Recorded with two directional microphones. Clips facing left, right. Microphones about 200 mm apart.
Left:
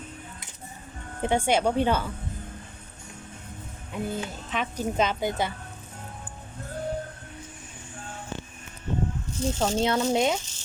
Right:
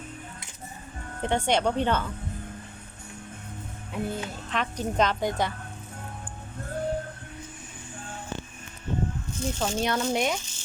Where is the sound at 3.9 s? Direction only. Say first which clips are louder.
Even; centre (ahead or behind).